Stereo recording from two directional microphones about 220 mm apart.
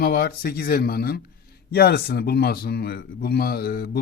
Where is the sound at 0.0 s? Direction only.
45° left (ahead or behind).